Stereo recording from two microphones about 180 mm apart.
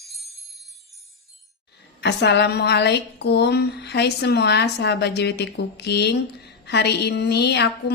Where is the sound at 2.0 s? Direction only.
70° left (ahead or behind).